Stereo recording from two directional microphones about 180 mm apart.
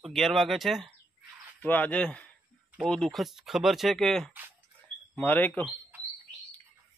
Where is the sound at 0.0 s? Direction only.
Centre (ahead or behind).